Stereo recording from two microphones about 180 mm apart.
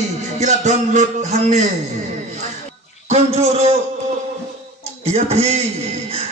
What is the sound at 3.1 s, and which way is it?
Speech, 35° right (ahead or behind).